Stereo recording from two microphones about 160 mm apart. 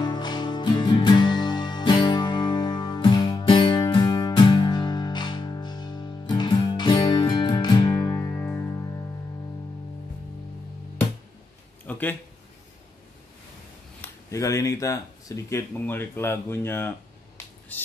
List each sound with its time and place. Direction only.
0.0 s music: 25° left (ahead or behind)
11.8 s a sound: 10° left (ahead or behind)
14.0 s speech: 20° left (ahead or behind)
17.7 s squawk: 10° left (ahead or behind)